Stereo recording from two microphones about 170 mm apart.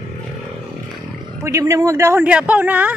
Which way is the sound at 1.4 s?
20° right (ahead or behind).